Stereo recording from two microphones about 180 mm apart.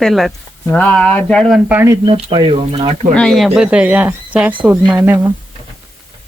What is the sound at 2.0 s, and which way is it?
Speech, 30° right (ahead or behind).